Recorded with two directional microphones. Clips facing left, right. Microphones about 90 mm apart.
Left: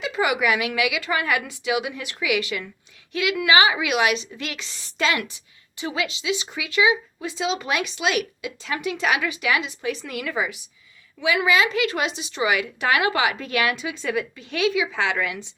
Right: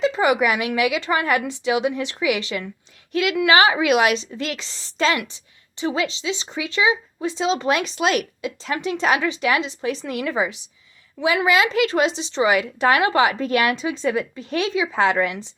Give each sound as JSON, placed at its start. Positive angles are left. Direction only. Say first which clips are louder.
{"t": 0.1, "sound": "a woman's voice", "louder": "right 3 dB", "side_deg": -35}
{"t": 3.4, "sound": "a woman's voice", "louder": "right 3 dB", "side_deg": -40}